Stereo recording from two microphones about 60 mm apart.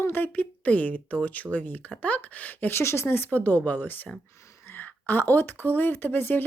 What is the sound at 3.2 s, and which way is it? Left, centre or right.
Speech, left.